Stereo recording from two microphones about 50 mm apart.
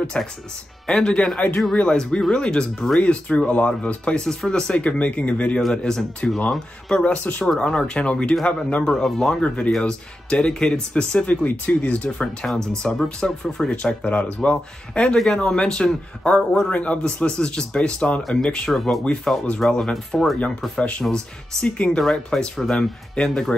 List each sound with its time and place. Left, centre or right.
0.2 s a man's voice: left
5.8 s a man's voice: centre
7.1 s speech: left
7.4 s speech: centre
8.8 s a man's voice: centre
11.2 s speech: left
12.8 s a man's voice: centre
14.0 s speech: left
15.1 s a man's voice: centre
16.7 s speech: left
18.7 s speech: centre
19.3 s a man's voice: centre
19.8 s speech: centre
21.1 s a man's voice: centre